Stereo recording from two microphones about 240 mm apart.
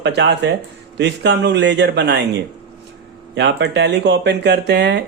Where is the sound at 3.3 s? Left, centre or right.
Right.